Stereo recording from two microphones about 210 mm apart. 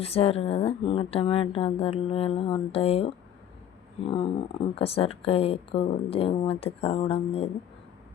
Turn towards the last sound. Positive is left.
turn(degrees=25)  # may be behind; listen again after turning